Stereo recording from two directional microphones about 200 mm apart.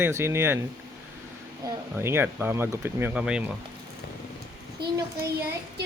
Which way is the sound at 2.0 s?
10° right (ahead or behind).